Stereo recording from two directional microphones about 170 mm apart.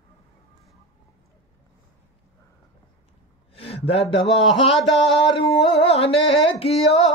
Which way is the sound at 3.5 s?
35° left (ahead or behind).